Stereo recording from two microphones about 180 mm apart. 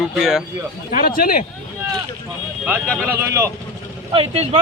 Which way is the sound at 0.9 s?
50° left (ahead or behind).